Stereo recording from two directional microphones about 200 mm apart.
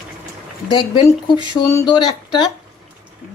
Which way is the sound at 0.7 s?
20° left (ahead or behind).